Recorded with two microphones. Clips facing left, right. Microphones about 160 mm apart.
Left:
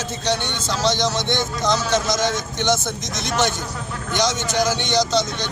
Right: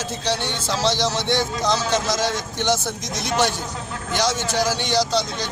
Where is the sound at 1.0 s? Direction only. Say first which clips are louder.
Even; 30° right (ahead or behind).